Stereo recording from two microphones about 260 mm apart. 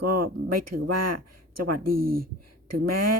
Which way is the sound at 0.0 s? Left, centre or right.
Right.